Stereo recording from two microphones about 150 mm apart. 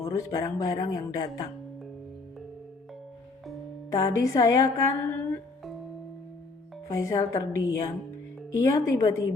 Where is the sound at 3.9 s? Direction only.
20° left (ahead or behind).